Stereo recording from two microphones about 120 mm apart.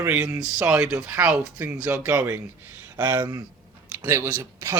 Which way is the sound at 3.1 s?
35° right (ahead or behind).